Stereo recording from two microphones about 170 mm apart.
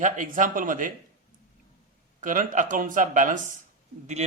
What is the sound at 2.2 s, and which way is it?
A man's voice, 50° right (ahead or behind).